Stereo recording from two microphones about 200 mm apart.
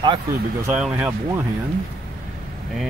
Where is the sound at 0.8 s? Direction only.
5° right (ahead or behind).